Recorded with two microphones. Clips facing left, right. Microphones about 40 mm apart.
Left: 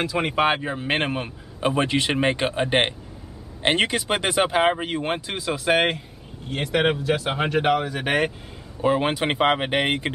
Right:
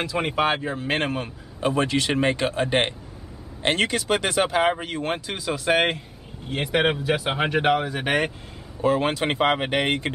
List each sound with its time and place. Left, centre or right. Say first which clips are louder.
0.0 s speech: left 1 dB; centre
0.4 s a man's voice: left 2 dB; centre
8.8 s speech: even; centre